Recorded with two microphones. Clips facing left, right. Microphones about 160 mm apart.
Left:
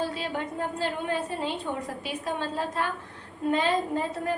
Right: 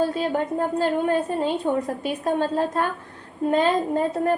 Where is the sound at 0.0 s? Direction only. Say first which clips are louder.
Right 8 dB; 45° right (ahead or behind).